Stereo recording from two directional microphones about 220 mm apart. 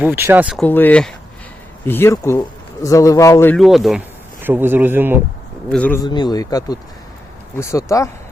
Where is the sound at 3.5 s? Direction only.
Centre (ahead or behind).